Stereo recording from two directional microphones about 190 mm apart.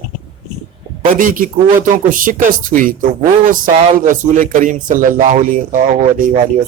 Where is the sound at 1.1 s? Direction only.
45° right (ahead or behind).